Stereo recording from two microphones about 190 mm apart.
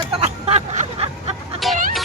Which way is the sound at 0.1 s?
35° right (ahead or behind).